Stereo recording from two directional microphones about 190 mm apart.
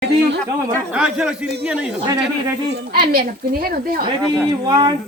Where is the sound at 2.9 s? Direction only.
50° right (ahead or behind).